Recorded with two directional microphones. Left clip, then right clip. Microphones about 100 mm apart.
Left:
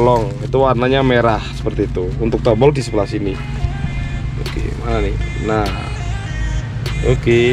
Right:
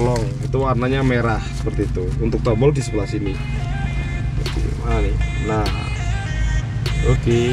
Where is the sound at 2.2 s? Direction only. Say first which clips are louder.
Left 5 dB; 50° left (ahead or behind).